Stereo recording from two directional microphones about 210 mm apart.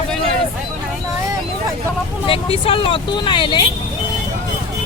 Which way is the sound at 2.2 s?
25° left (ahead or behind).